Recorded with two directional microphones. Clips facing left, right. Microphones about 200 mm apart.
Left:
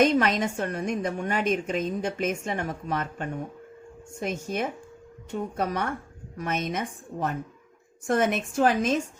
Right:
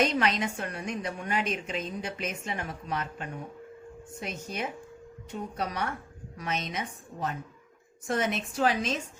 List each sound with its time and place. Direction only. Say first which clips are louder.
0.0 s a woman's voice: left 5 dB; 50° left (ahead or behind)